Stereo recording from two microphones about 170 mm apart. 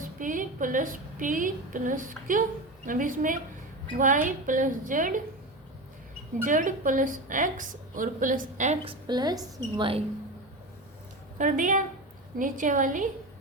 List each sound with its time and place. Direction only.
0.0 s a woman's voice: 50° right (ahead or behind)
6.4 s a woman's voice: 50° right (ahead or behind); by 10.0 s 30° right (ahead or behind)
11.3 s a woman's voice: 50° right (ahead or behind)